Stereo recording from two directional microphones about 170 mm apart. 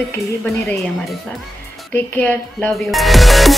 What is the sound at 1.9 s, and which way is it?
Speech, 10° left (ahead or behind).